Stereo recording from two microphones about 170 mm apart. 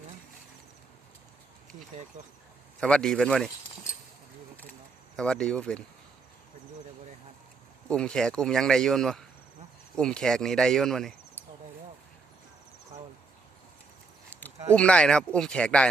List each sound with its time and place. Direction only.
2.1 s speech: 45° right (ahead or behind)
2.8 s speech: 5° left (ahead or behind)
5.1 s speech: 5° left (ahead or behind)
7.9 s speech: 5° left (ahead or behind)
14.8 s speech: 5° left (ahead or behind)